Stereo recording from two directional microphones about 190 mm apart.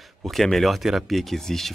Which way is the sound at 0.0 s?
Centre (ahead or behind).